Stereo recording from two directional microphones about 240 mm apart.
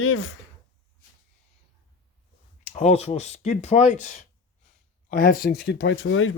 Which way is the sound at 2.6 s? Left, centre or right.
Left.